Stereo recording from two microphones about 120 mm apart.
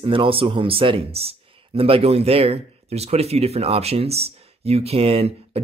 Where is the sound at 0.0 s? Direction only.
45° right (ahead or behind).